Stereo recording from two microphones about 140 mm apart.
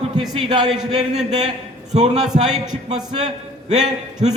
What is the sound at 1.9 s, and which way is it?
Speech, 55° right (ahead or behind).